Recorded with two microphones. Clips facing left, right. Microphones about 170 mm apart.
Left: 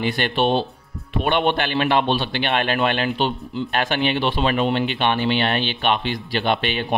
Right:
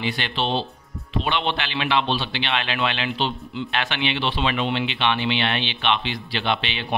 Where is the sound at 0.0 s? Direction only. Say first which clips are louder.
Left 6 dB; 50° left (ahead or behind).